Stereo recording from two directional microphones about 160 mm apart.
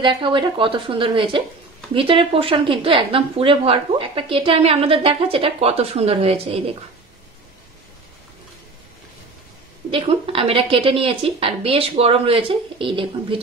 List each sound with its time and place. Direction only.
0.0 s a woman's voice: 30° right (ahead or behind)
9.8 s a woman's voice: 35° right (ahead or behind)